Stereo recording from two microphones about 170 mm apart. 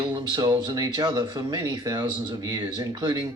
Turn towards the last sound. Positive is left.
turn(degrees=-25)  # may be behind; listen again after turning